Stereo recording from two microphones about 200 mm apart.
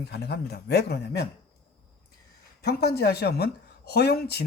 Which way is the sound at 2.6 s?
55° left (ahead or behind).